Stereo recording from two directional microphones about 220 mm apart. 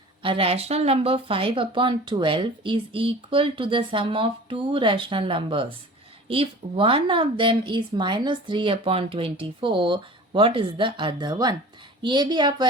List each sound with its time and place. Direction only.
0.2 s speech: 25° right (ahead or behind)